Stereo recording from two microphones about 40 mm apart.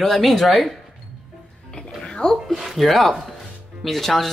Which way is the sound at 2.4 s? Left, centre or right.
Centre.